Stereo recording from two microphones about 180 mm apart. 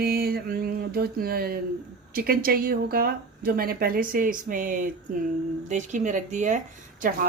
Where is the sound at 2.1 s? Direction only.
55° right (ahead or behind).